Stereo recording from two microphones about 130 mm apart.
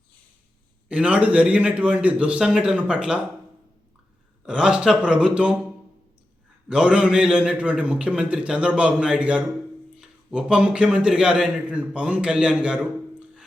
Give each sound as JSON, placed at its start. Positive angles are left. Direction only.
{"t": 0.9, "sound": "a man's voice", "side_deg": -10}
{"t": 4.4, "sound": "a man's voice", "side_deg": -5}
{"t": 6.7, "sound": "a man's voice", "side_deg": -5}